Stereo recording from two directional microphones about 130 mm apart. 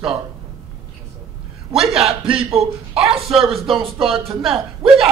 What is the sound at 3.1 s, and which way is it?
Speech, 45° right (ahead or behind).